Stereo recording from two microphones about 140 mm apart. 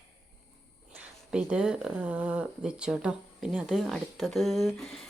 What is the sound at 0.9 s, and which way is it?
Speech, 10° right (ahead or behind).